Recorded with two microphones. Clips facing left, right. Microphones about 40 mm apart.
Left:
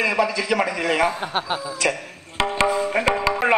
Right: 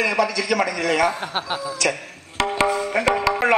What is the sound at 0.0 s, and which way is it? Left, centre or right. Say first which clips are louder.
A man's voice: even; left.